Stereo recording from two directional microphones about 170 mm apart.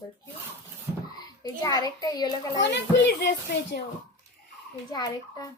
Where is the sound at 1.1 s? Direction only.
25° left (ahead or behind).